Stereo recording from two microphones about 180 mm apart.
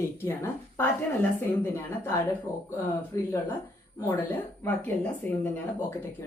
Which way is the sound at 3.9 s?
10° left (ahead or behind).